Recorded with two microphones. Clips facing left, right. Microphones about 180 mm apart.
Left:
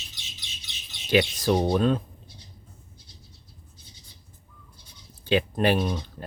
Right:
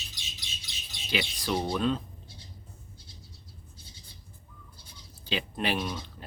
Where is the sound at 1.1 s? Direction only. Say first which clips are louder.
Left 9 dB; 45° left (ahead or behind).